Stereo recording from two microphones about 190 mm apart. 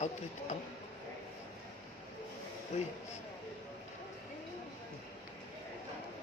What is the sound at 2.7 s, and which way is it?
Speech, 40° left (ahead or behind).